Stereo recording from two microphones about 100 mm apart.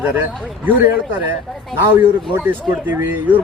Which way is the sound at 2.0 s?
20° right (ahead or behind).